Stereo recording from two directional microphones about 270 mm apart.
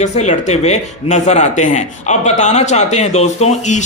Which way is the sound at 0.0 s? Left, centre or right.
Left.